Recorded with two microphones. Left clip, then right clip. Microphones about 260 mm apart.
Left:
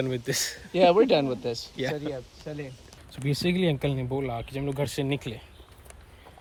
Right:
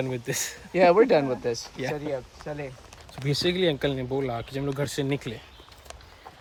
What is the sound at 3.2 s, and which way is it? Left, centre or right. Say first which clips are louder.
Speech: right 3 dB; centre.